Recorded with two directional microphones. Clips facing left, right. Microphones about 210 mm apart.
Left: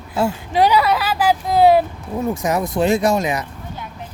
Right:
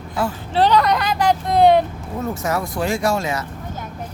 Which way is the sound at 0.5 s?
10° left (ahead or behind).